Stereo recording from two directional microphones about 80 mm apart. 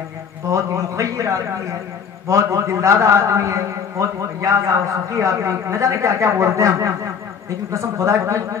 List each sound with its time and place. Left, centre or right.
0.5 s a man's voice: right